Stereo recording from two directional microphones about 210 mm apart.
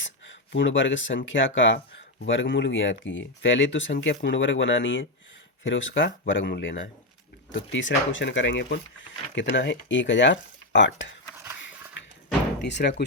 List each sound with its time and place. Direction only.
0.0 s speech: 60° left (ahead or behind)
12.0 s music: 60° left (ahead or behind)
12.6 s speech: 55° left (ahead or behind)